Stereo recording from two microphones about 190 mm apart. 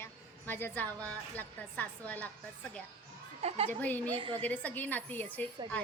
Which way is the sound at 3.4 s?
30° right (ahead or behind).